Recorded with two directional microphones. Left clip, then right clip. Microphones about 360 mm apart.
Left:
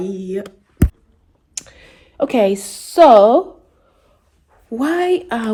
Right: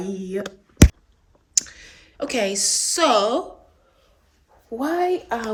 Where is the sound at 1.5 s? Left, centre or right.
Centre.